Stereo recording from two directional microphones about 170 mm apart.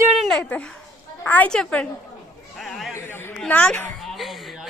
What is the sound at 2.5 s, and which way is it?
Chatter, centre (ahead or behind).